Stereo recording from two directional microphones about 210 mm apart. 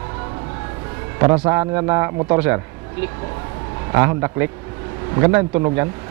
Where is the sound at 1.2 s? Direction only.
20° right (ahead or behind).